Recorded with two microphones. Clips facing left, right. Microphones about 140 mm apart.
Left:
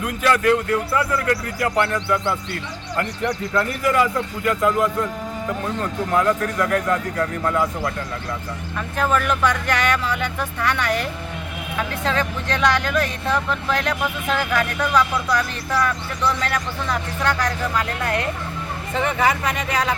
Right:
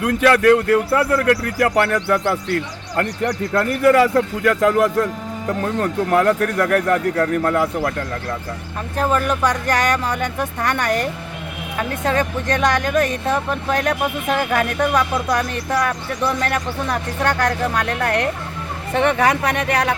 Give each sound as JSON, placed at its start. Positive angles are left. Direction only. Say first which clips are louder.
{"t": 0.0, "sound": "a man's voice", "louder": "right 5 dB", "side_deg": -75}
{"t": 5.8, "sound": "speech", "louder": "right 4 dB", "side_deg": -65}
{"t": 9.0, "sound": "speech", "louder": "right 2 dB", "side_deg": -35}
{"t": 17.7, "sound": "a man's voice", "louder": "right 3 dB", "side_deg": -65}